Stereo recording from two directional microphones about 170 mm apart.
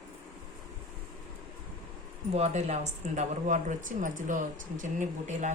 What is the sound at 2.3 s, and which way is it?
Speech, 40° right (ahead or behind).